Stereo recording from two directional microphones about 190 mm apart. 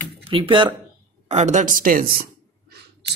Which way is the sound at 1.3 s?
40° right (ahead or behind).